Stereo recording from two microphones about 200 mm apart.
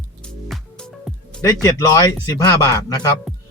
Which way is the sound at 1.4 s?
20° left (ahead or behind).